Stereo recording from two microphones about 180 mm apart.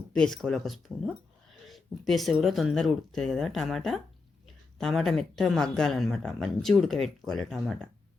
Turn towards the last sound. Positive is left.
turn(degrees=0)  # may be behind; listen again after turning